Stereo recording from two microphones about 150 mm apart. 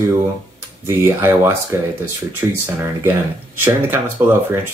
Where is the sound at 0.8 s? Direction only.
15° right (ahead or behind).